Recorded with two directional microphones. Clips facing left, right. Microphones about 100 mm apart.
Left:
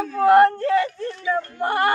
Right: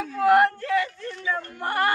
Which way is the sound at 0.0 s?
35° left (ahead or behind).